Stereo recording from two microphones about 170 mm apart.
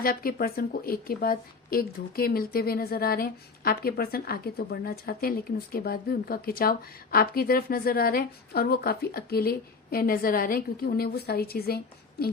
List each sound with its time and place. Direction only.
0.0 s a woman's voice: 60° left (ahead or behind)